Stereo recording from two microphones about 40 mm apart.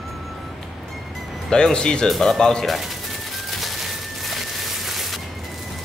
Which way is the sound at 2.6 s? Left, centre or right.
Centre.